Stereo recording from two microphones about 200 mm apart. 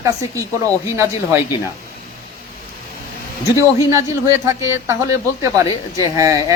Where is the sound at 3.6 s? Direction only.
15° right (ahead or behind).